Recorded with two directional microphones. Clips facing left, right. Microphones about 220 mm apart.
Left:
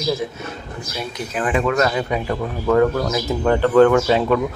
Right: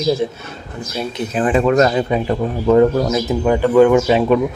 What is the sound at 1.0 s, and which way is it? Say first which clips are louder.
Speech: right 6 dB; 25° right (ahead or behind).